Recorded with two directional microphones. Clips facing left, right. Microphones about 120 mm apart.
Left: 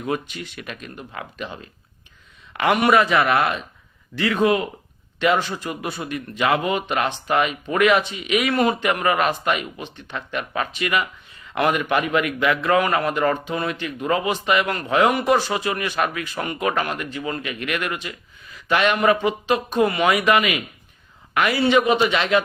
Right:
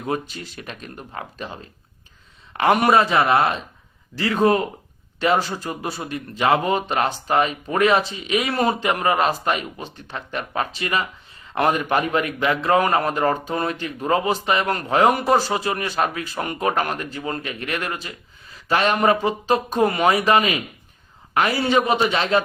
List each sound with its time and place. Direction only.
0.0 s a man's voice: 35° right (ahead or behind)
2.5 s a man's voice: 35° right (ahead or behind)